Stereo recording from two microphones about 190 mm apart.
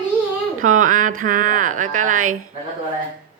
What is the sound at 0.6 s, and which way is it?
Speech, 45° right (ahead or behind).